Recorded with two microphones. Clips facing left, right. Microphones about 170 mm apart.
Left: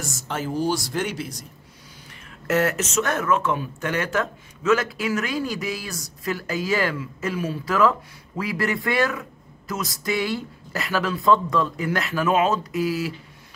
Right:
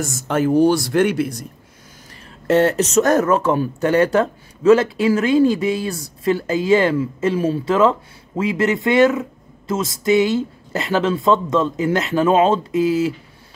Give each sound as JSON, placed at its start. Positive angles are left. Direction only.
{"t": 0.0, "sound": "speech", "side_deg": -55}
{"t": 2.4, "sound": "speech", "side_deg": -30}